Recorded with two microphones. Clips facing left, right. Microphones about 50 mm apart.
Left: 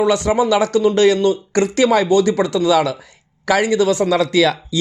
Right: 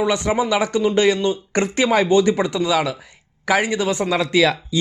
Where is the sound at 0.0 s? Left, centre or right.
Centre.